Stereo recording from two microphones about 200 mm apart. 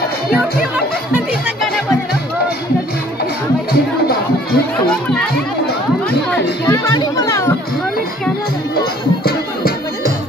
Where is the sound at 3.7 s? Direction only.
50° left (ahead or behind).